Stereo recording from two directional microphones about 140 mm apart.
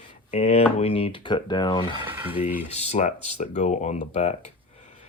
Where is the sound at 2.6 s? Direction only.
50° left (ahead or behind).